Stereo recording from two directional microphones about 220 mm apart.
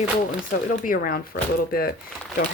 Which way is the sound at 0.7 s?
40° left (ahead or behind).